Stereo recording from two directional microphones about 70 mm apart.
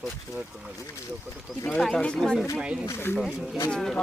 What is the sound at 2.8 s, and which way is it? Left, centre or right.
Speech, left.